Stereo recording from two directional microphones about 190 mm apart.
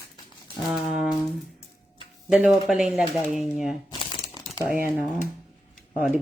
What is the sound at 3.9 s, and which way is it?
Crumpling, 25° left (ahead or behind).